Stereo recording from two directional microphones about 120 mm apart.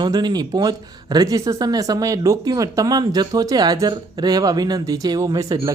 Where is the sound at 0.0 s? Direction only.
35° right (ahead or behind).